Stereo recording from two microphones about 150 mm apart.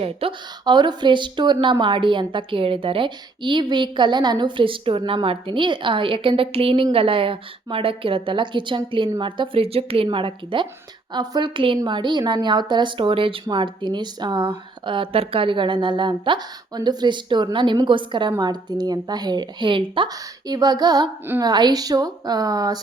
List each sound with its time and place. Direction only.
0.0 s a woman's voice: 35° right (ahead or behind)